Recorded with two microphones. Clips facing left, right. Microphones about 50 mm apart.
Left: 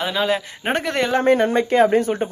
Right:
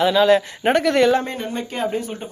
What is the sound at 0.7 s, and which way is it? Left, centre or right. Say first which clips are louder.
Speech: right 4 dB; left.